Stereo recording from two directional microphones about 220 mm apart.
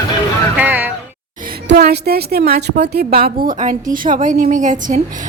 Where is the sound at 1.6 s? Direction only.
50° right (ahead or behind).